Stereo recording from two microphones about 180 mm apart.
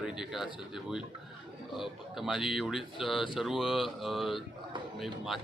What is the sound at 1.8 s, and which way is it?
Speech, centre (ahead or behind).